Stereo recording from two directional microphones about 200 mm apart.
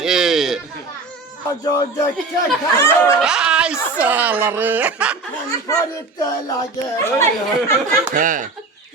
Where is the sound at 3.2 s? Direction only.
5° right (ahead or behind).